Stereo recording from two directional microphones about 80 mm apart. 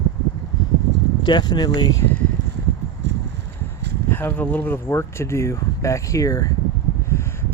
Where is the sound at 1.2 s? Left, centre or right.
Left.